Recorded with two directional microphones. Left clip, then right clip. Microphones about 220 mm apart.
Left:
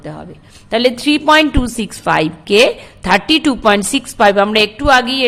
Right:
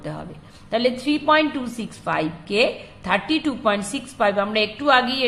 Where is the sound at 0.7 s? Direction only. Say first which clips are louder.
Left 8 dB; 40° left (ahead or behind).